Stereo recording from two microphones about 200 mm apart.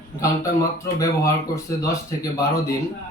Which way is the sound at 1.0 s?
15° left (ahead or behind).